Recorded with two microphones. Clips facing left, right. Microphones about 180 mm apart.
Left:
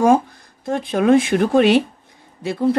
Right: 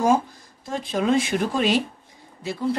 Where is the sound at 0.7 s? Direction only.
60° left (ahead or behind).